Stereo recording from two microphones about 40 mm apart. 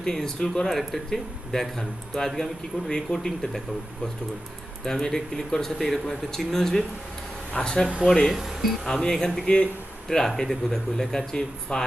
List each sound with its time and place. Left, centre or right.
0.0 s speech: centre
2.9 s speech: centre
4.8 s speech: centre
8.3 s speech: centre
8.9 s speech: centre